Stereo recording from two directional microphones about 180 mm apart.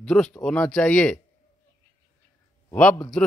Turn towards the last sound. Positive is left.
turn(degrees=5)  # may be behind; listen again after turning